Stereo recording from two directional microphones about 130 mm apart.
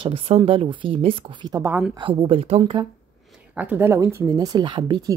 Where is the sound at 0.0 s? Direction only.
45° right (ahead or behind).